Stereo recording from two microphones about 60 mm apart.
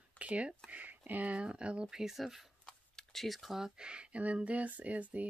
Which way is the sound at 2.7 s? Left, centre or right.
Centre.